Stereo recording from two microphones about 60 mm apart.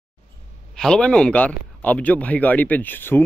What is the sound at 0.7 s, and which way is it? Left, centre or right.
A man's voice, centre.